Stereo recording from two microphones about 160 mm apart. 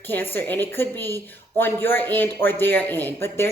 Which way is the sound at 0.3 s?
10° left (ahead or behind).